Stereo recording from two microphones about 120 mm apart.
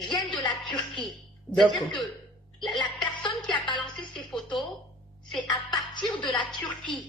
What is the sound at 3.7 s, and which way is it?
Music, 40° left (ahead or behind).